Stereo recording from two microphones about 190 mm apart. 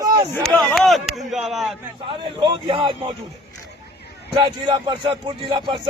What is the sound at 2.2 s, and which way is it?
Speech, 25° right (ahead or behind).